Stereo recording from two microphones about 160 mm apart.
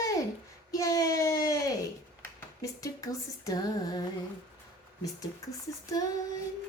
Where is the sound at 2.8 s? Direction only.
20° left (ahead or behind).